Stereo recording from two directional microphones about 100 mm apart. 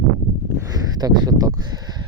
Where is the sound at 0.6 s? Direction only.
40° right (ahead or behind).